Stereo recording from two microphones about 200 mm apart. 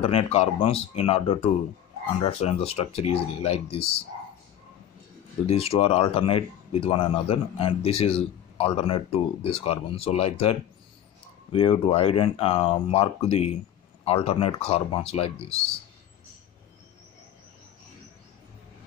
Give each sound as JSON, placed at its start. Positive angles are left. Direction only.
{"t": 0.0, "sound": "speech", "side_deg": 30}
{"t": 5.5, "sound": "speech", "side_deg": 30}